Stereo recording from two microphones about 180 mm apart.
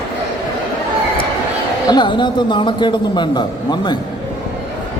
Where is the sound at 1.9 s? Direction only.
25° left (ahead or behind).